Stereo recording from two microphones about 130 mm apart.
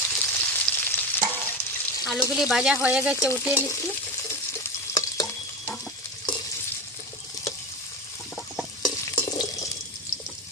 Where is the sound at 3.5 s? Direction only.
20° left (ahead or behind).